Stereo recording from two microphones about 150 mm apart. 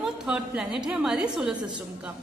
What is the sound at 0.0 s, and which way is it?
A woman's voice, 5° right (ahead or behind).